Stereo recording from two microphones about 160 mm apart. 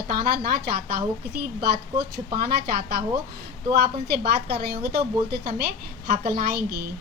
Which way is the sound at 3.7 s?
80° right.